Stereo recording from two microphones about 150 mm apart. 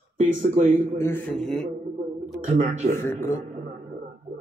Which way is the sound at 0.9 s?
15° left (ahead or behind).